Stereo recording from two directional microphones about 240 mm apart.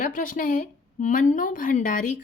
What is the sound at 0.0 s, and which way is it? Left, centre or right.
Speech, left.